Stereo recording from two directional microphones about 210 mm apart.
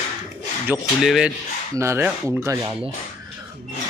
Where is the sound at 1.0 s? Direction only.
5° right (ahead or behind).